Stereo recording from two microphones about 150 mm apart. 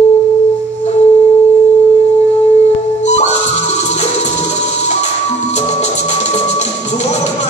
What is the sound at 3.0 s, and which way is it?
Music, 50° left (ahead or behind).